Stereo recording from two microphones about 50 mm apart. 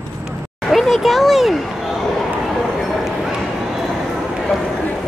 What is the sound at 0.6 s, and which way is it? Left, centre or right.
Speech, centre.